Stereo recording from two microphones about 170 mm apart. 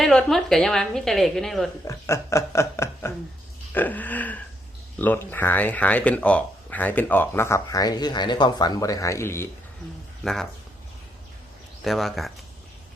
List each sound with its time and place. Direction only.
0.0 s a woman's voice: 5° left (ahead or behind)
1.8 s speech: 15° left (ahead or behind)
3.7 s a sound: 10° left (ahead or behind)
4.9 s speech: 10° left (ahead or behind)
10.2 s a woman's voice: centre (ahead or behind)
11.8 s a woman's voice: centre (ahead or behind)